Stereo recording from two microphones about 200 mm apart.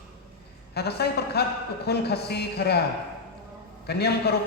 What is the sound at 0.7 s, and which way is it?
A man's voice, 55° left (ahead or behind).